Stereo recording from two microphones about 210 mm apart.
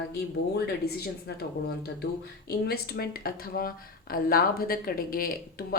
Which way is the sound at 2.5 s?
50° left (ahead or behind).